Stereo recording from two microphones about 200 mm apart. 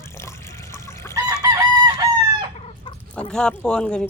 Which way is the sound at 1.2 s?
15° right (ahead or behind).